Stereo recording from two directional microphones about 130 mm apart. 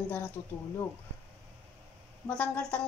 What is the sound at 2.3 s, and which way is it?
Speech, 5° left (ahead or behind).